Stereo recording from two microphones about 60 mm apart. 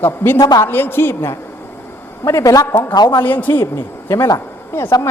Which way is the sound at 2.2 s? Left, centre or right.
Left.